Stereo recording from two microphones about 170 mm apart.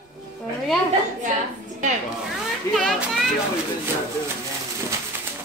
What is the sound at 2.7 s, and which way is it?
Speech, centre (ahead or behind).